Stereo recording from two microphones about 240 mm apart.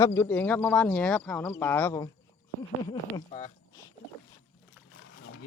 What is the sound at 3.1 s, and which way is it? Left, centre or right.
Speech, left.